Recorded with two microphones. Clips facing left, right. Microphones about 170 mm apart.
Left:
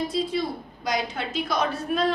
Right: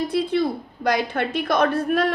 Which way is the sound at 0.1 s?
60° right (ahead or behind).